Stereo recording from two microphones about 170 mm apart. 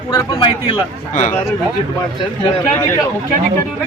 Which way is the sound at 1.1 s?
50° left (ahead or behind).